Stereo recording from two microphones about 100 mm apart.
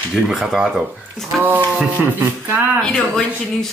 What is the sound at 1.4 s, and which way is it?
Music, 20° right (ahead or behind).